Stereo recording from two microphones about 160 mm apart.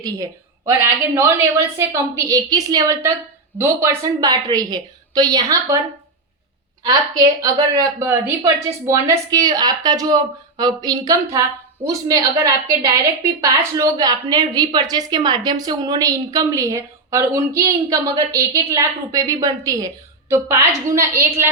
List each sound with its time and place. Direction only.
0.0 s a woman's voice: 20° right (ahead or behind)
7.4 s a woman's voice: 25° right (ahead or behind)